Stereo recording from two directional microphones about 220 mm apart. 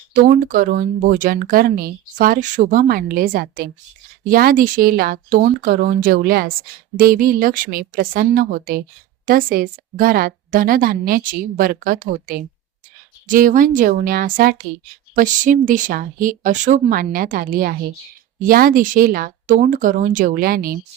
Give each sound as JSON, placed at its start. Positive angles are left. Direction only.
{"t": 0.1, "sound": "speech", "side_deg": -40}